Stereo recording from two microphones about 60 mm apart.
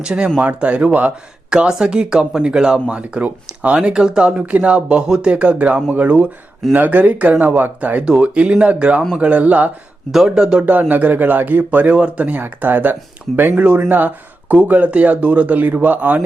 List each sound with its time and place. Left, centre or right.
0.0 s speech: centre
8.0 s speech: centre
10.1 s speech: centre
10.7 s speech: right